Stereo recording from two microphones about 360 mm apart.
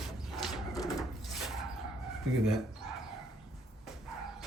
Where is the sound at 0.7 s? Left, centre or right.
Centre.